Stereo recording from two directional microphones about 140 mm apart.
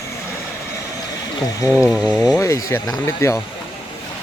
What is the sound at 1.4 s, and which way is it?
Speech, 20° left (ahead or behind).